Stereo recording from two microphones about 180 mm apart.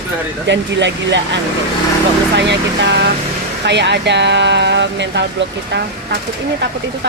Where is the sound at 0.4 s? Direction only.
80° right.